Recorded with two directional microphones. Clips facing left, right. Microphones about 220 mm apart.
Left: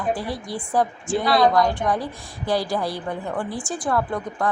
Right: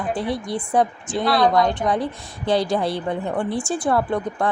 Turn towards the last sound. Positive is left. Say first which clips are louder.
# right 3 dB
turn(degrees=-25)  # may be behind; listen again after turning